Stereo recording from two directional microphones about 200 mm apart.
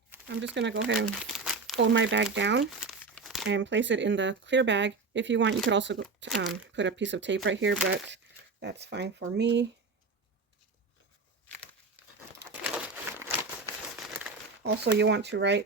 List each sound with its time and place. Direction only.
0.1 s crumpling: 10° right (ahead or behind)
0.5 s speech: 65° right (ahead or behind)
1.2 s crumpling: centre (ahead or behind)
1.8 s speech: 65° right (ahead or behind)
2.8 s crumpling: 5° left (ahead or behind)
3.4 s speech: 65° right (ahead or behind)
6.2 s speech: centre (ahead or behind)
6.7 s speech: 65° right (ahead or behind)
11.9 s crumpling: 10° right (ahead or behind)
14.6 s speech: 60° right (ahead or behind)